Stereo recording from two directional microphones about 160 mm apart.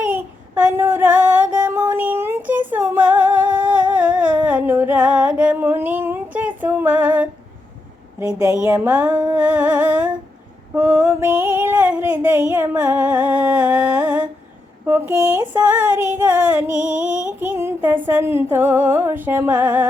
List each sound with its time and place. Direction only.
0.0 s child singing: 10° right (ahead or behind)
1.5 s music: 10° right (ahead or behind)
2.6 s humming: 10° right (ahead or behind)
8.3 s speech: 20° right (ahead or behind)
8.5 s music: 10° right (ahead or behind)
9.3 s humming: 10° right (ahead or behind)
10.8 s a sound: 10° right (ahead or behind)
15.7 s music: 10° right (ahead or behind)
17.0 s a sound: 10° right (ahead or behind)
18.0 s music: 15° right (ahead or behind)